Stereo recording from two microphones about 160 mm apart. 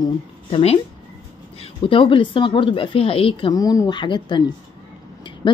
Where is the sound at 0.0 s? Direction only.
35° left (ahead or behind).